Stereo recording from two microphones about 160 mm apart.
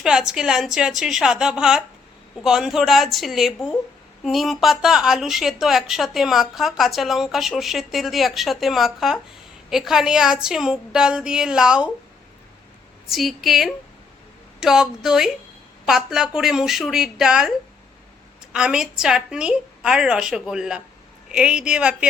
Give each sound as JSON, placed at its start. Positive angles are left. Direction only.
{"t": 0.0, "sound": "a woman's voice", "side_deg": -5}
{"t": 13.1, "sound": "a woman's voice", "side_deg": 0}
{"t": 18.5, "sound": "a woman's voice", "side_deg": -5}